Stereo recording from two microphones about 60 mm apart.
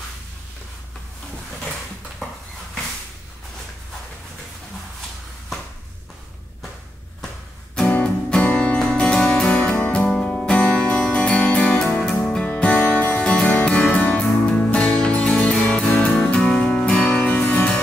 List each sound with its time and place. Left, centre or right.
8.0 s music: centre